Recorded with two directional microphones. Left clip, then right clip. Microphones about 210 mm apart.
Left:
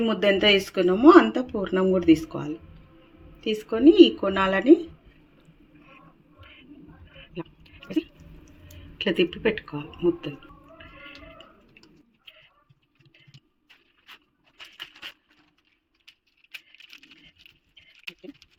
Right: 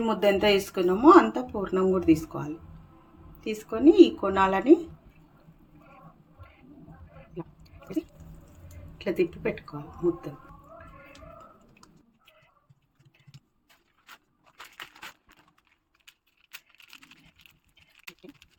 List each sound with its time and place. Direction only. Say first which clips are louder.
0.0 s speech: left 2 dB; 5° left (ahead or behind)
9.0 s speech: left 4 dB; 20° left (ahead or behind)